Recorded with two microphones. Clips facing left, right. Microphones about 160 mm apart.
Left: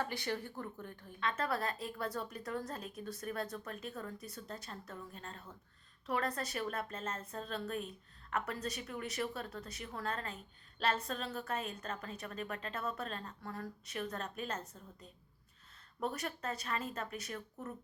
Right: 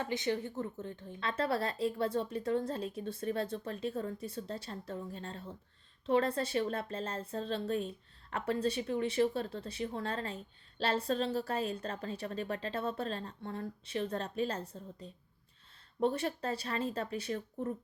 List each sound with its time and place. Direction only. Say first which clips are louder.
0.0 s a woman's voice: right 4 dB; 20° right (ahead or behind)